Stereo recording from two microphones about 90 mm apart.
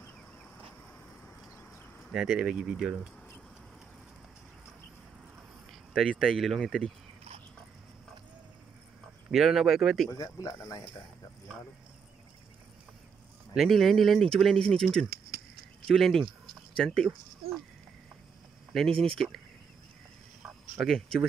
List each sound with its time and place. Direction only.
2.1 s speech: 5° right (ahead or behind)
5.7 s speech: centre (ahead or behind)
9.3 s speech: 5° right (ahead or behind)
10.1 s speech: 40° left (ahead or behind)
13.6 s speech: centre (ahead or behind)
18.7 s speech: 5° left (ahead or behind)
20.7 s speech: 5° left (ahead or behind)